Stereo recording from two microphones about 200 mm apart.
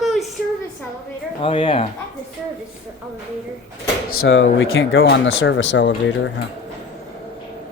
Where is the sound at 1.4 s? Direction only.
25° left (ahead or behind).